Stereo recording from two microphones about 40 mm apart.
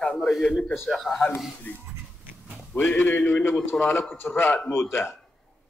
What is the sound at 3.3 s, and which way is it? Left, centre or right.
Speech, left.